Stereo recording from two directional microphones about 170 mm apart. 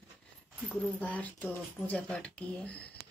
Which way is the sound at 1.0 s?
10° left (ahead or behind).